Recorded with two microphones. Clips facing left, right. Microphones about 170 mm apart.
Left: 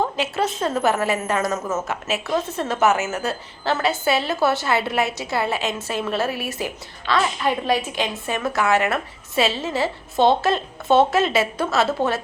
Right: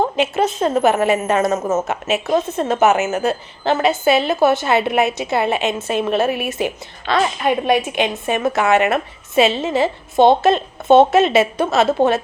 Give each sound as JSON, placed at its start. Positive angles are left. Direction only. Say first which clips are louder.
{"t": 0.0, "sound": "a woman's voice", "louder": "right 5 dB", "side_deg": -20}
{"t": 1.5, "sound": "speech", "louder": "right 6 dB", "side_deg": -40}
{"t": 1.9, "sound": "a woman's voice", "louder": "right 5 dB", "side_deg": -20}